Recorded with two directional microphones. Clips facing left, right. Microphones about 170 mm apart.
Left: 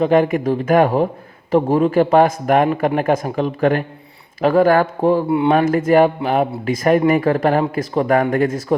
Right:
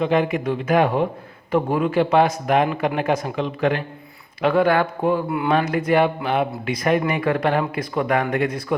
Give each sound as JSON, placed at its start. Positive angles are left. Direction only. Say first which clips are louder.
{"t": 0.0, "sound": "speech", "louder": "left 5 dB", "side_deg": 45}
{"t": 4.9, "sound": "speech", "louder": "left 5 dB", "side_deg": 30}
{"t": 5.5, "sound": "speech", "louder": "left 4 dB", "side_deg": 45}